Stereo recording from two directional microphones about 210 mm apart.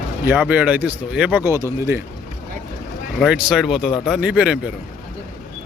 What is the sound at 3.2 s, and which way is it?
Speech, 5° right (ahead or behind).